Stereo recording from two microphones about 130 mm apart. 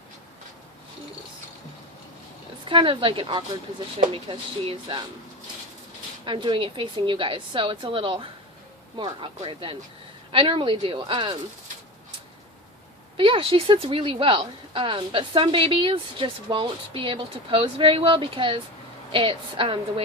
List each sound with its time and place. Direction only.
2.6 s a woman's voice: 40° right (ahead or behind)
6.2 s a woman's voice: 40° right (ahead or behind)
13.1 s a woman's voice: 40° right (ahead or behind)